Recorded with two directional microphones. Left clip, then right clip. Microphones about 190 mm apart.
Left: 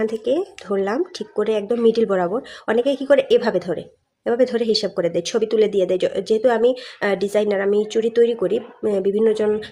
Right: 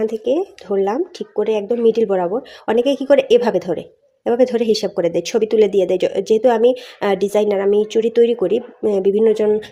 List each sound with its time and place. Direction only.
0.0 s speech: 10° right (ahead or behind)